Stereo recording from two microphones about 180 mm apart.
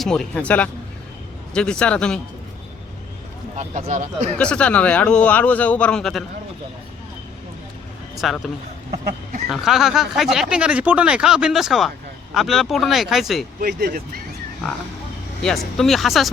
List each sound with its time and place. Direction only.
0.0 s speech: 5° left (ahead or behind)
3.6 s speech: 40° right (ahead or behind)
4.4 s a man's voice: 5° left (ahead or behind)
8.1 s a man's voice: centre (ahead or behind)
9.5 s speech: centre (ahead or behind)
13.6 s speech: 60° right (ahead or behind)
14.6 s speech: 5° left (ahead or behind)